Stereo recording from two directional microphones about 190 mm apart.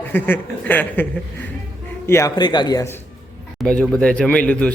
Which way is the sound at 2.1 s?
15° left (ahead or behind).